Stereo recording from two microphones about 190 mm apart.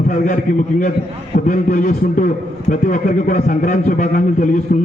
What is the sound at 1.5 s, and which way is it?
A man's voice, 45° left (ahead or behind).